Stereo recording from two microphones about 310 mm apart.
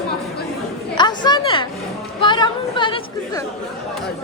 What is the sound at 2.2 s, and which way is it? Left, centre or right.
Chatter, centre.